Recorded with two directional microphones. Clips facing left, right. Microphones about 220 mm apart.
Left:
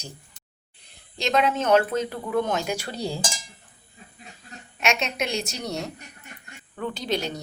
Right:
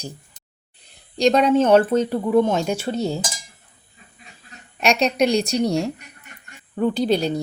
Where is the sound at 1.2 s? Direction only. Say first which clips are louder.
Right 7 dB; 35° right (ahead or behind).